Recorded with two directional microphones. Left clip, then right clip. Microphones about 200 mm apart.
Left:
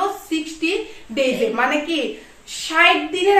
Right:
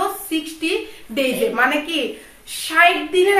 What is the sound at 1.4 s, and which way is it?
A woman's voice, 10° right (ahead or behind).